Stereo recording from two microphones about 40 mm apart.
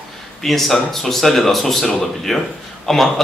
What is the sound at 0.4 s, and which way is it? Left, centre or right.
Speech, centre.